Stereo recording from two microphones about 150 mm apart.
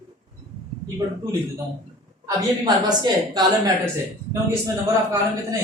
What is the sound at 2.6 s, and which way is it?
A woman's voice, 25° right (ahead or behind).